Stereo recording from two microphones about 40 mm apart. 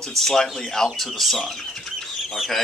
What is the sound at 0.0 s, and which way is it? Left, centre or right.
Speech, centre.